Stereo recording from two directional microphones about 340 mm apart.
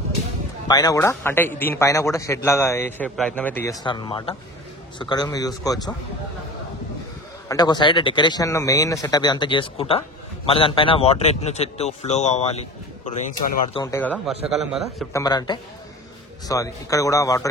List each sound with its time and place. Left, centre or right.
0.7 s speech: centre
7.4 s speech: centre
13.7 s a man's voice: centre
15.2 s speech: centre